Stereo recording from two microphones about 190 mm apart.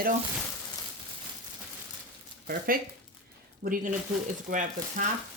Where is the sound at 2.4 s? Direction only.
55° right (ahead or behind).